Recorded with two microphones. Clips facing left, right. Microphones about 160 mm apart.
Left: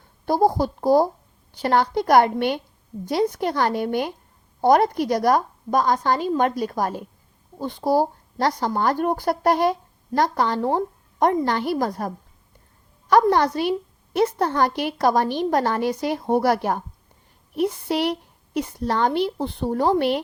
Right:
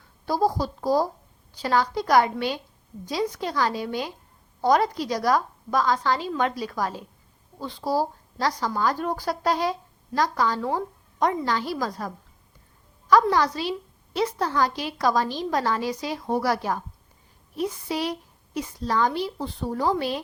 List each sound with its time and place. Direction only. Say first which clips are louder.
0.3 s a woman's voice: left 4 dB; 25° left (ahead or behind)
1.5 s a woman's voice: left 4 dB; 60° left (ahead or behind)
10.6 s speech: left 5 dB; 30° left (ahead or behind)
11.2 s a woman's voice: left 4 dB; 55° left (ahead or behind)